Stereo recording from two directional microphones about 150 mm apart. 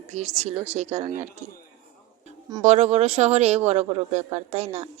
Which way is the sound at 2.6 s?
50° right (ahead or behind).